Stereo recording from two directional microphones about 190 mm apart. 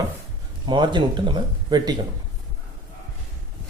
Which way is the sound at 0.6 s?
25° right (ahead or behind).